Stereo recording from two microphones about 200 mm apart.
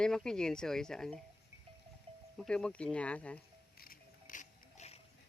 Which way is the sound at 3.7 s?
45° left (ahead or behind).